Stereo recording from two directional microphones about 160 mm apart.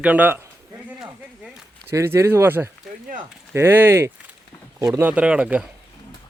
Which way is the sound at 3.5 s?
15° right (ahead or behind).